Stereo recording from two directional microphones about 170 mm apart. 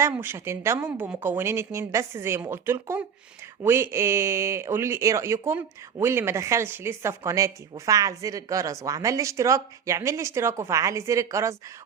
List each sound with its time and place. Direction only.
0.0 s speech: 15° right (ahead or behind)